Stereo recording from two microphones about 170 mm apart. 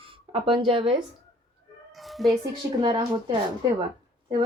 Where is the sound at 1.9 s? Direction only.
Centre (ahead or behind).